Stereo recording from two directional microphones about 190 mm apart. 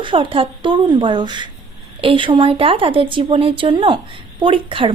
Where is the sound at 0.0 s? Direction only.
25° right (ahead or behind).